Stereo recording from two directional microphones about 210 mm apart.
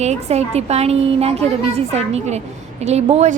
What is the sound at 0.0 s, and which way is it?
A woman's voice, 30° right (ahead or behind).